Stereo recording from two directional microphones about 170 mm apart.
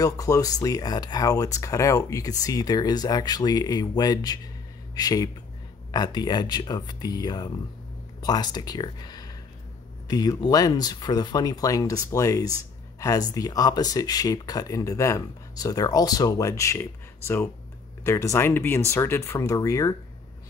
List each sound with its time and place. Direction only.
0.0 s speech: 20° left (ahead or behind)